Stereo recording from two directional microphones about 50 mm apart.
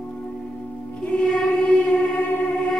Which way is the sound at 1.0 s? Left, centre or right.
Left.